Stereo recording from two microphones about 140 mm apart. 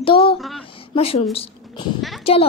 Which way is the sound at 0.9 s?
45° left (ahead or behind).